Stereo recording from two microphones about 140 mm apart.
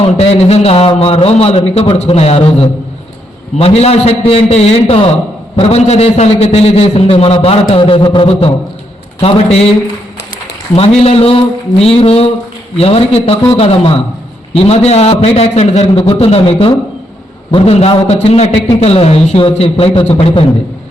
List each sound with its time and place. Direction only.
0.0 s a man's voice: 45° left (ahead or behind)
10.8 s a man's voice: 45° left (ahead or behind)